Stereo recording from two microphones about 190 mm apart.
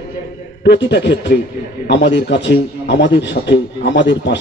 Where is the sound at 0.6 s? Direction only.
65° left (ahead or behind).